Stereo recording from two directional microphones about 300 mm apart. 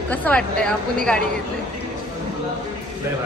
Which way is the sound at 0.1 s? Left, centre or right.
Centre.